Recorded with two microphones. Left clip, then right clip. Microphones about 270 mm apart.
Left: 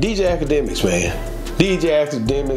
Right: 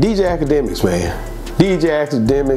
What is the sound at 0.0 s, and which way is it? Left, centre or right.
Speech, right.